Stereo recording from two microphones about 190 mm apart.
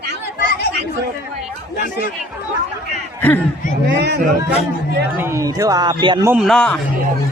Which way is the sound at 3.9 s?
65° right (ahead or behind).